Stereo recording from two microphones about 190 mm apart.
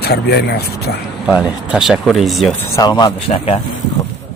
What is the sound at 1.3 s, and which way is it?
Speech, 10° right (ahead or behind).